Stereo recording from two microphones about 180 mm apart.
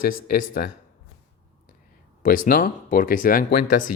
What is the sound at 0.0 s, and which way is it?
Speech, 55° left (ahead or behind).